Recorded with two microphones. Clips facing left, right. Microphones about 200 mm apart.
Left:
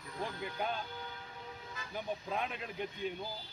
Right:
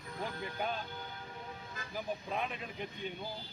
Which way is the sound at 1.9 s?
Centre (ahead or behind).